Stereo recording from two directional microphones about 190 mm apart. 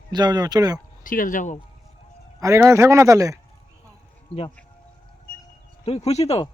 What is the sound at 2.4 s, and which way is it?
Speech, 15° right (ahead or behind).